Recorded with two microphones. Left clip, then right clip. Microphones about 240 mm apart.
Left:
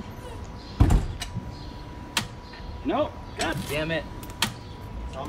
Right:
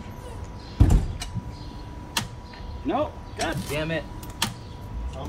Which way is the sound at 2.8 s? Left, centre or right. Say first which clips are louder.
Even; centre.